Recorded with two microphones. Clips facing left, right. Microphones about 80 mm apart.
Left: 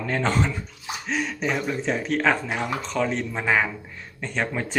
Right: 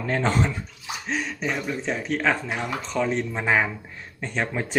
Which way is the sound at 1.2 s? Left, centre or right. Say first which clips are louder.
Left 2 dB; centre.